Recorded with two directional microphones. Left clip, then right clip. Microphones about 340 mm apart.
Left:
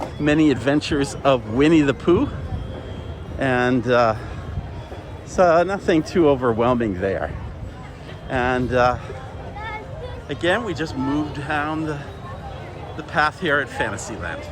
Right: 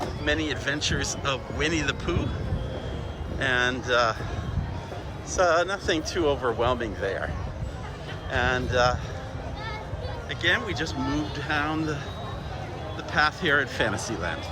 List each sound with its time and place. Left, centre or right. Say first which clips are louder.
0.3 s speech: left 9 dB; centre
3.3 s speech: left 5 dB; centre
5.4 s speech: left 6 dB; centre
8.3 s speech: left 5 dB; centre
10.2 s speech: left 4 dB; centre
13.0 s speech: left 4 dB; centre